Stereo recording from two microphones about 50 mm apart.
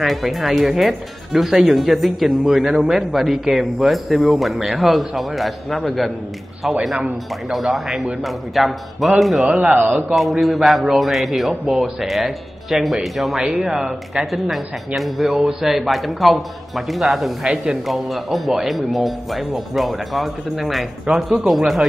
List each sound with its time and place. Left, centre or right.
0.0 s speech: centre
9.6 s speech: right
10.4 s speech: centre
17.4 s speech: centre
17.8 s speech: centre